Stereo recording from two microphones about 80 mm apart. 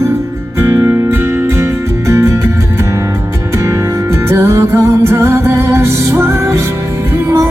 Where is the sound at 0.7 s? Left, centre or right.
Right.